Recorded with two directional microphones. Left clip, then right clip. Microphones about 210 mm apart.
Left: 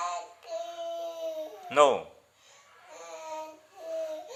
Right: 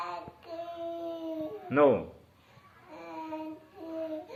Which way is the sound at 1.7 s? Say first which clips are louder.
Left 2 dB; 40° left (ahead or behind).